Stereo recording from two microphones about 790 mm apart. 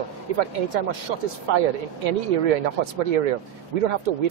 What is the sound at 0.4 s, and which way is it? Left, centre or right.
Speech, right.